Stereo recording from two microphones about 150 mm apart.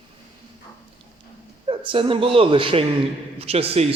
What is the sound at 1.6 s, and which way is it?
A man's voice, 35° right (ahead or behind).